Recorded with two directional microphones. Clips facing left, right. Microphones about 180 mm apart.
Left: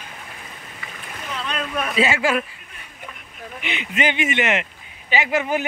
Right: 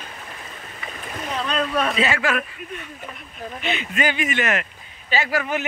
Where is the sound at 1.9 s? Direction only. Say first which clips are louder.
Left 2 dB; 25° left (ahead or behind).